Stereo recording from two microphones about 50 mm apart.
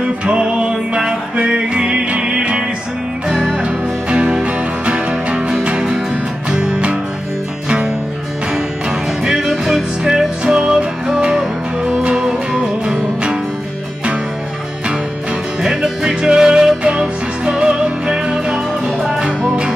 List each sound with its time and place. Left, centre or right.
0.2 s music: right
4.1 s music: right
9.2 s music: centre
10.0 s music: centre
15.6 s music: centre